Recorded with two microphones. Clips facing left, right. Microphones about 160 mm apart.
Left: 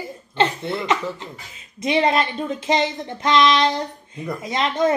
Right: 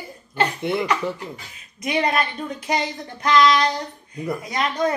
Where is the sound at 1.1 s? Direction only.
25° left (ahead or behind).